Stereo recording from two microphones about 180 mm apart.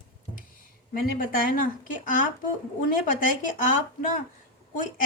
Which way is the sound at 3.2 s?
50° left (ahead or behind).